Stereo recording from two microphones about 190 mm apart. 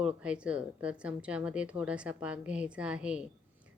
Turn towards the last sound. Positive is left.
turn(degrees=-5)  # may be behind; listen again after turning